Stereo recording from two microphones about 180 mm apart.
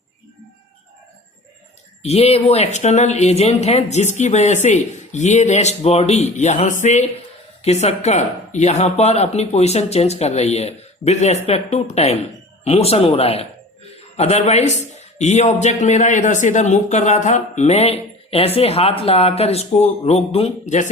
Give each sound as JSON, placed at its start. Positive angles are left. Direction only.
{"t": 2.0, "sound": "a man's voice", "side_deg": 35}